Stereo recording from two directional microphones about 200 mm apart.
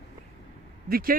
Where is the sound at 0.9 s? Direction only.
50° right (ahead or behind).